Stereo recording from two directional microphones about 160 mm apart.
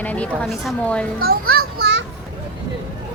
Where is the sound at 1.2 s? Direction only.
70° right (ahead or behind).